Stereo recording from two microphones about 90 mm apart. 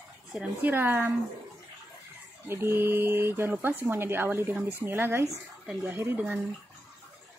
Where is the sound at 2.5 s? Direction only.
25° right (ahead or behind).